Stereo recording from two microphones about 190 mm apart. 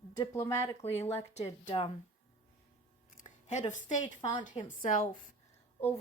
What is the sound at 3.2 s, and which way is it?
Speech, 40° left (ahead or behind).